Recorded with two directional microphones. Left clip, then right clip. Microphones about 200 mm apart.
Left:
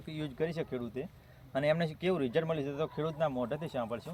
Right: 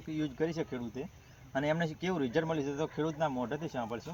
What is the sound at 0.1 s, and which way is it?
Speech, 30° left (ahead or behind).